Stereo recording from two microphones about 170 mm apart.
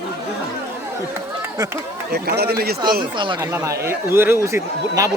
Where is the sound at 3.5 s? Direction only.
15° right (ahead or behind).